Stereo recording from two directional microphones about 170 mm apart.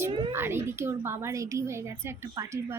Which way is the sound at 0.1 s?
30° right (ahead or behind).